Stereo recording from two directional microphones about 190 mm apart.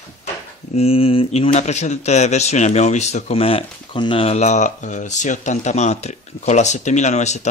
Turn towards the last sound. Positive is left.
turn(degrees=35)  # may be behind; listen again after turning